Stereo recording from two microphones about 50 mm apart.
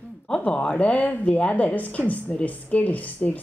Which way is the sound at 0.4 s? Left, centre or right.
Left.